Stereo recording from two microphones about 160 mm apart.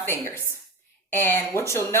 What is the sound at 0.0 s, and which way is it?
Speech, 15° left (ahead or behind).